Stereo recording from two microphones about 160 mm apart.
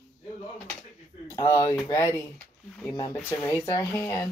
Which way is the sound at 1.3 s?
20° left (ahead or behind).